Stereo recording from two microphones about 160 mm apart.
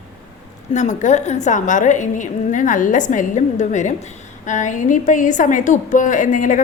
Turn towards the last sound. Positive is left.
turn(degrees=55)  # may be behind; listen again after turning